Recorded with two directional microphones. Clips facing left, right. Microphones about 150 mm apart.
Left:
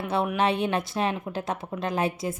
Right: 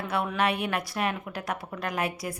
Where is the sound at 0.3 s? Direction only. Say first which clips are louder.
Left 2 dB; 25° left (ahead or behind).